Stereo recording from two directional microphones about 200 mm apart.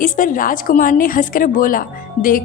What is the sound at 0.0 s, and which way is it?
A woman's voice, 40° left (ahead or behind).